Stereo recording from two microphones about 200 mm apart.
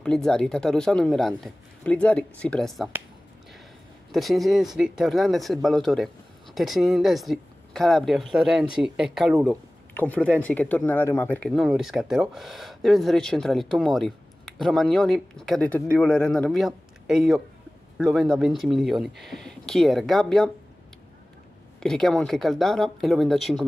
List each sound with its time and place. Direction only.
0.0 s speech: 5° left (ahead or behind)
4.1 s speech: centre (ahead or behind)
21.7 s speech: 5° left (ahead or behind)